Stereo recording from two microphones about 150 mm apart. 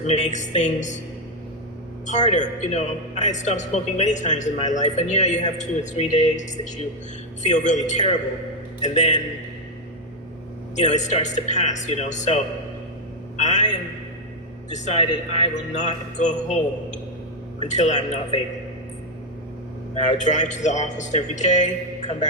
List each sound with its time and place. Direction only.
0.0 s a man's voice: 50° left (ahead or behind)
2.0 s a man's voice: 50° left (ahead or behind)
10.8 s a man's voice: 50° left (ahead or behind)
13.3 s a sound: 50° left (ahead or behind)
14.7 s a man's voice: 45° left (ahead or behind)
15.5 s a man's voice: 55° left (ahead or behind)
17.6 s a man's voice: 50° left (ahead or behind)
19.9 s a man's voice: 50° left (ahead or behind)